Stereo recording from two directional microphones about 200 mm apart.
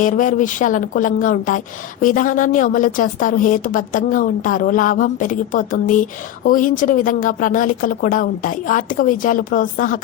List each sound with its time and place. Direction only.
0.0 s a woman's voice: 40° left (ahead or behind)